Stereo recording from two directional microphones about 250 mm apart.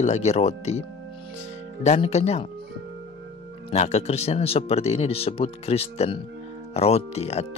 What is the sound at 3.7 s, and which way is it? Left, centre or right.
Speech, left.